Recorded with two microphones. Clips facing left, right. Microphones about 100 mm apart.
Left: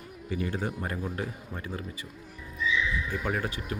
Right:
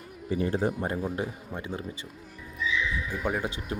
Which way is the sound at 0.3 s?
35° right (ahead or behind).